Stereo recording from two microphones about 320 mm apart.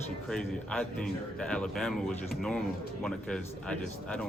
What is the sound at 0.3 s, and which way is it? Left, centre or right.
A man's voice, centre.